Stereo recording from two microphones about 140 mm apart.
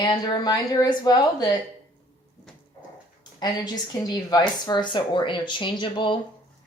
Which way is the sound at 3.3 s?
30° left (ahead or behind).